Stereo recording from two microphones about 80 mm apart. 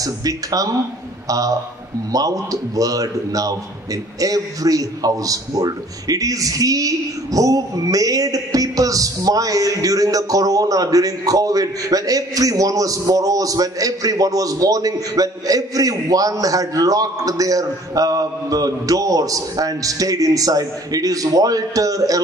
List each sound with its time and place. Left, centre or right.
0.0 s a man's voice: right
2.1 s a man's voice: right